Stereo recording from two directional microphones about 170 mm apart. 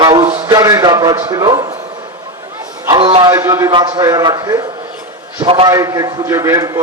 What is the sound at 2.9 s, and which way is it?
Speech, 30° right (ahead or behind).